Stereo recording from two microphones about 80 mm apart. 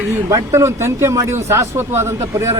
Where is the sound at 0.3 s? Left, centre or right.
Right.